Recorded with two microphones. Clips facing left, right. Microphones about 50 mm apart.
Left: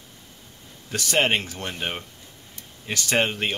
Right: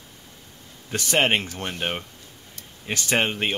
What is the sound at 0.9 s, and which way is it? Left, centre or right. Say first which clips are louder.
Speech: right 1 dB; right.